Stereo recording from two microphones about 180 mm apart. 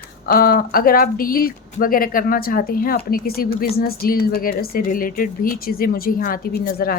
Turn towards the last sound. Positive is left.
turn(degrees=50)  # may be behind; listen again after turning